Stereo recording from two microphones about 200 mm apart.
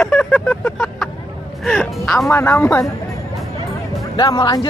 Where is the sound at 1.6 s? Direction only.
5° left (ahead or behind).